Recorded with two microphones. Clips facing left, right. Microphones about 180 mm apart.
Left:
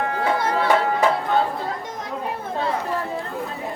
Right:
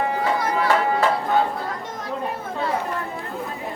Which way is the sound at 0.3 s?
30° left (ahead or behind).